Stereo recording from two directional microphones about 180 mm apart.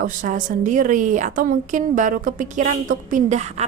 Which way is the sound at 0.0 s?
45° right (ahead or behind).